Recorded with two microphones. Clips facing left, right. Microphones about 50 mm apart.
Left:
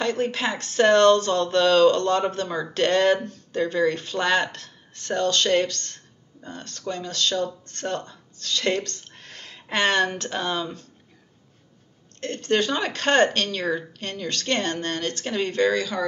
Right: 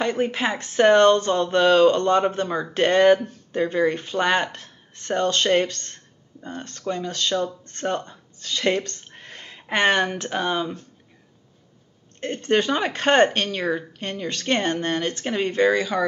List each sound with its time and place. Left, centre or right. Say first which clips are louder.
0.0 s speech: right 2 dB; centre
12.2 s speech: right 2 dB; centre